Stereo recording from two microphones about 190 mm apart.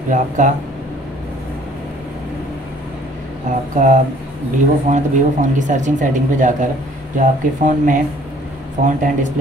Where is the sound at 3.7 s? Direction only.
40° right (ahead or behind).